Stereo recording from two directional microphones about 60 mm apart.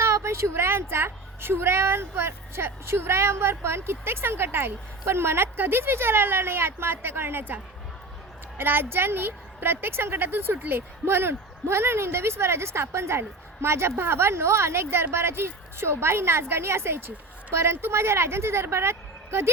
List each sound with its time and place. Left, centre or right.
0.0 s a woman's voice: right